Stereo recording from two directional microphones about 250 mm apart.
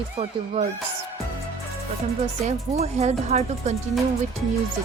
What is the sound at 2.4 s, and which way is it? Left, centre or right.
Speech, right.